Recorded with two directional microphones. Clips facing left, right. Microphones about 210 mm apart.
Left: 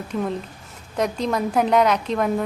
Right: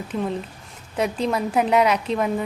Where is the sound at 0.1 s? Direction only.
Centre (ahead or behind).